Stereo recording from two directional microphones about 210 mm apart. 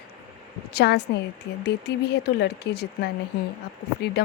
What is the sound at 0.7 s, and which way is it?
Speech, 50° left (ahead or behind).